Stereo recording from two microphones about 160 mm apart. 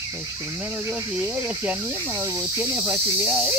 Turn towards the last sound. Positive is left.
turn(degrees=-5)  # may be behind; listen again after turning